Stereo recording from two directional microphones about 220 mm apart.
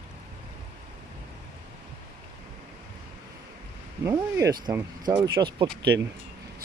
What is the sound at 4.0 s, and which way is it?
Speech, 15° right (ahead or behind).